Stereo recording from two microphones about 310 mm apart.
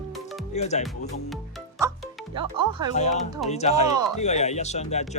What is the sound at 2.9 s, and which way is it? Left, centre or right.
Speech, left.